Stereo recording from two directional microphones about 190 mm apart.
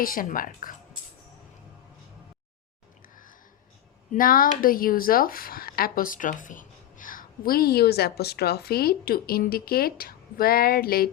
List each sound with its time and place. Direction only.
0.0 s speech: 45° left (ahead or behind)
4.1 s speech: 45° left (ahead or behind)